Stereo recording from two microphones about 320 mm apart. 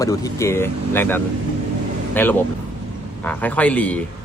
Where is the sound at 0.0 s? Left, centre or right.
Centre.